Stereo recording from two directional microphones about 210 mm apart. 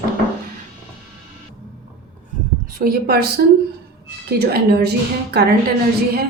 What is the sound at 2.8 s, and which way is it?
Speech, 45° right (ahead or behind).